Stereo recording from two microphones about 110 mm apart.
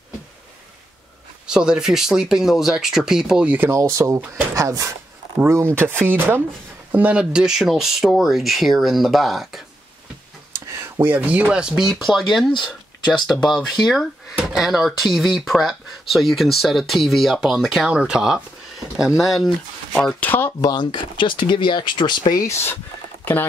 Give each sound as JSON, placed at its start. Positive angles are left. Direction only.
{"t": 1.5, "sound": "speech", "side_deg": -5}
{"t": 3.9, "sound": "speech", "side_deg": -30}
{"t": 11.0, "sound": "speech", "side_deg": -15}
{"t": 20.6, "sound": "speech", "side_deg": 40}
{"t": 22.4, "sound": "speech", "side_deg": 25}